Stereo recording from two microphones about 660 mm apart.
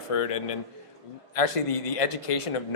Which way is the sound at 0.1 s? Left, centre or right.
Left.